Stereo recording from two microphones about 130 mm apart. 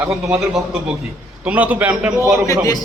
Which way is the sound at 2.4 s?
25° left (ahead or behind).